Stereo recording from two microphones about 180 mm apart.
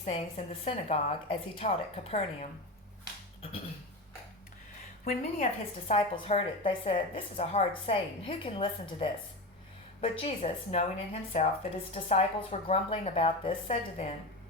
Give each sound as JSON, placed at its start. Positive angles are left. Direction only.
{"t": 0.0, "sound": "a woman's voice", "side_deg": 35}
{"t": 5.5, "sound": "a woman's voice", "side_deg": 35}